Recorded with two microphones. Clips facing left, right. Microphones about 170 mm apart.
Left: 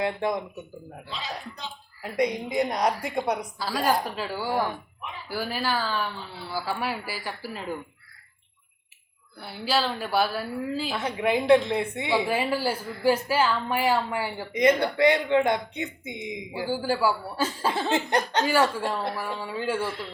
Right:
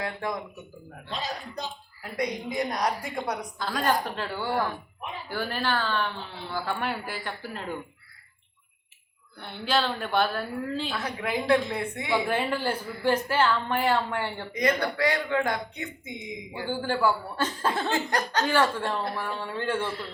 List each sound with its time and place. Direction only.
0.0 s speech: 25° left (ahead or behind)
1.1 s speech: 45° right (ahead or behind)
2.0 s speech: 20° left (ahead or behind)
3.6 s a woman's voice: 5° left (ahead or behind)
9.4 s a woman's voice: 5° left (ahead or behind)
10.9 s speech: 25° left (ahead or behind)
12.1 s speech: 5° left (ahead or behind)
14.5 s speech: 20° left (ahead or behind)
16.5 s speech: 5° left (ahead or behind)
17.8 s speech: 25° left (ahead or behind)
18.4 s speech: 10° left (ahead or behind)